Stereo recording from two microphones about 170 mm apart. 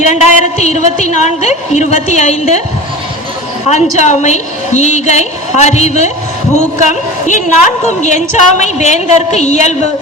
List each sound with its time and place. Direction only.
0.0 s a woman's voice: 45° left (ahead or behind)
3.7 s a woman's voice: 45° left (ahead or behind)